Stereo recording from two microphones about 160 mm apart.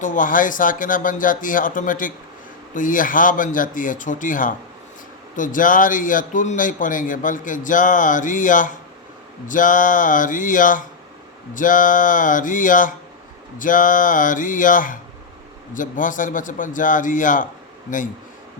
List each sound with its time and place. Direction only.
0.0 s a man's voice: 55° left (ahead or behind)